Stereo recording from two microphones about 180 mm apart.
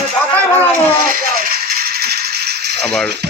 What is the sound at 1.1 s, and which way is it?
Rattle, 55° right (ahead or behind).